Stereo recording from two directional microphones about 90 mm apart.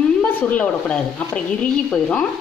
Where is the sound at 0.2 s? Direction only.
20° left (ahead or behind).